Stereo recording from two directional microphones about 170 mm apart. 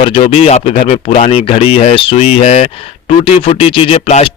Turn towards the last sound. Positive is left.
turn(degrees=35)  # may be behind; listen again after turning